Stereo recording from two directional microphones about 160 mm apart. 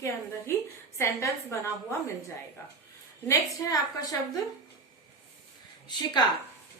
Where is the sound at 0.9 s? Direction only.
15° left (ahead or behind).